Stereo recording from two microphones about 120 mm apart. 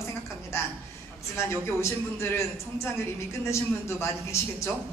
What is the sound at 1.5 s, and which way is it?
A man's voice, 20° left (ahead or behind).